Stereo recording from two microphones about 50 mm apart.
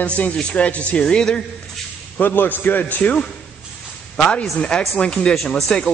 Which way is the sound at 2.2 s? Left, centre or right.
Left.